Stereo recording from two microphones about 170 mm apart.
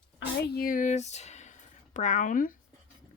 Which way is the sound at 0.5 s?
55° left (ahead or behind).